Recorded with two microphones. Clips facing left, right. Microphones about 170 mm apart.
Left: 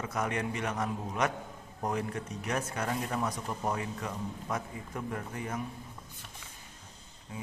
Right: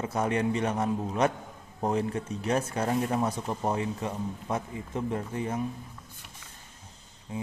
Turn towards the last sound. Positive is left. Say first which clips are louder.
# right 7 dB
turn(degrees=-30)  # may be behind; listen again after turning